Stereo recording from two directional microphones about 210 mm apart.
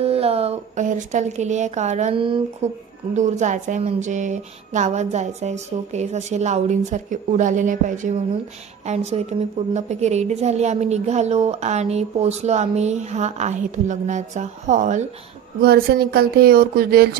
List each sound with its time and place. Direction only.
0.0 s a woman's voice: 30° right (ahead or behind)
3.2 s a woman's voice: 35° right (ahead or behind)
15.6 s speech: 45° right (ahead or behind)